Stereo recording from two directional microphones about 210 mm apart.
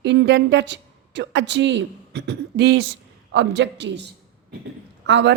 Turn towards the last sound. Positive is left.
turn(degrees=-55)  # may be behind; listen again after turning